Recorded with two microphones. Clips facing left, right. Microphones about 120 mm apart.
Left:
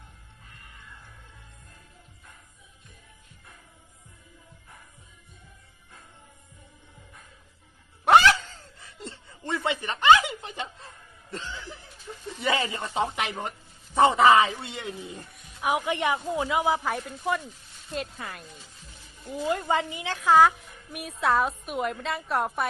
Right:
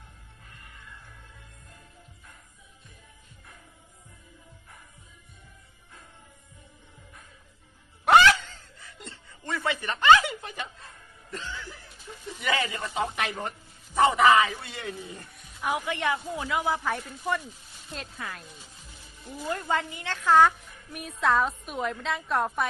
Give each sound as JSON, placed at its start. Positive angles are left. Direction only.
{"t": 8.0, "sound": "a sound", "side_deg": 30}
{"t": 11.3, "sound": "speech", "side_deg": 25}
{"t": 16.8, "sound": "a woman's voice", "side_deg": 0}
{"t": 19.3, "sound": "a woman's voice", "side_deg": 15}